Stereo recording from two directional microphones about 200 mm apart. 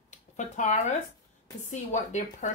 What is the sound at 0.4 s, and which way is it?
Speech, 35° left (ahead or behind).